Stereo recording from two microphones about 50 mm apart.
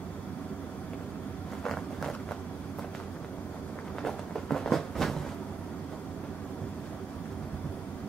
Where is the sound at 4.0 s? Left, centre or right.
Centre.